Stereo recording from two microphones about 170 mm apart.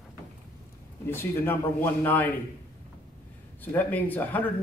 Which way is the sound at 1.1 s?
10° left (ahead or behind).